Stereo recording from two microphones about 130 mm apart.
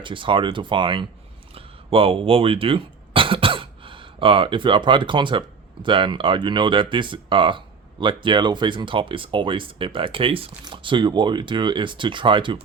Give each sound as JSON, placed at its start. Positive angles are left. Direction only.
{"t": 0.0, "sound": "speech", "side_deg": -40}
{"t": 1.5, "sound": "throat clearing", "side_deg": -45}
{"t": 5.8, "sound": "speech", "side_deg": -40}